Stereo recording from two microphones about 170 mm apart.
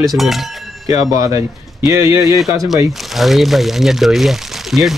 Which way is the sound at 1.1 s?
20° right (ahead or behind).